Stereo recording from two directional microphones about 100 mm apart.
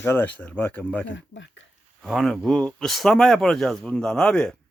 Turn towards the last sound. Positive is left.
turn(degrees=10)  # may be behind; listen again after turning